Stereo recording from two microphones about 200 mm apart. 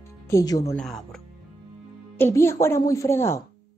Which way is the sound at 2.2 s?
10° left (ahead or behind).